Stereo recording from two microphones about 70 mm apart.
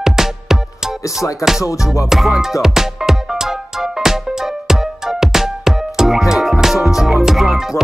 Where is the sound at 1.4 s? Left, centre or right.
Left.